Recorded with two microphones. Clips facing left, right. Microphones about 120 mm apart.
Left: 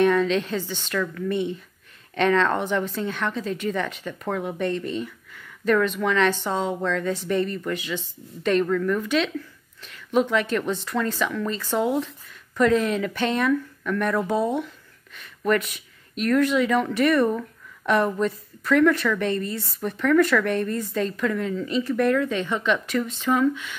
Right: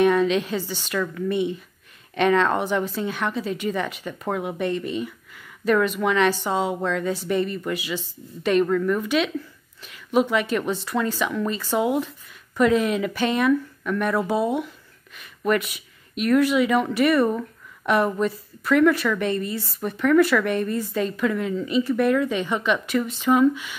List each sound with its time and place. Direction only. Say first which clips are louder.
0.0 s speech: right 1 dB; 10° right (ahead or behind)